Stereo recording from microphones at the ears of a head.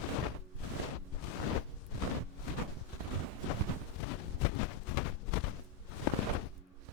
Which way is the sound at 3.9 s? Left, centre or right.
Left.